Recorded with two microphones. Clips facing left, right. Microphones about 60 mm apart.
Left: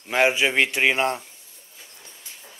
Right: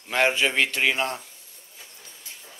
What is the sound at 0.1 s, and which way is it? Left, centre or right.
A man's voice, centre.